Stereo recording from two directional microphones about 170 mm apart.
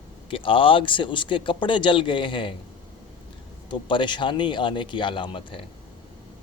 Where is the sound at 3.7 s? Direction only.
30° left (ahead or behind).